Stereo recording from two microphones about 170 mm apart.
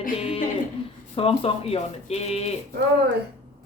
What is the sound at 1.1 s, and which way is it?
Speech, 35° left (ahead or behind).